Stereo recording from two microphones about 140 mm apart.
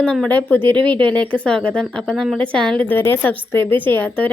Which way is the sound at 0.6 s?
35° right (ahead or behind).